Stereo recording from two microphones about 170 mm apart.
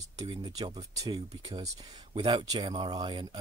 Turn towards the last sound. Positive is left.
turn(degrees=-25)  # may be behind; listen again after turning